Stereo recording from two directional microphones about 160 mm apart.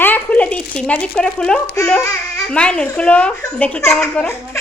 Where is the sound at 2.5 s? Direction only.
5° left (ahead or behind).